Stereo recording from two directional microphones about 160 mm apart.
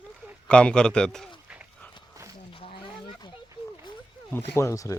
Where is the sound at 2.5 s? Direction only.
35° left (ahead or behind).